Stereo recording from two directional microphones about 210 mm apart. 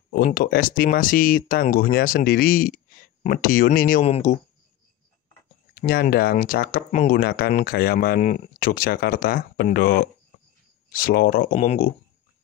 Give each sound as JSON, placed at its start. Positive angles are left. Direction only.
{"t": 0.1, "sound": "speech", "side_deg": 40}
{"t": 4.0, "sound": "speech", "side_deg": 30}
{"t": 5.8, "sound": "speech", "side_deg": 45}